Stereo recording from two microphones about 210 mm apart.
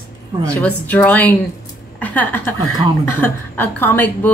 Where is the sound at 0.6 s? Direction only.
5° left (ahead or behind).